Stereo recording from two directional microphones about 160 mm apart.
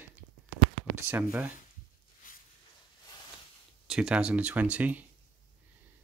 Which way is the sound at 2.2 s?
55° left (ahead or behind).